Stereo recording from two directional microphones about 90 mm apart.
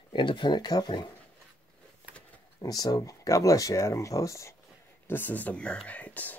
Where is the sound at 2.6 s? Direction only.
45° left (ahead or behind).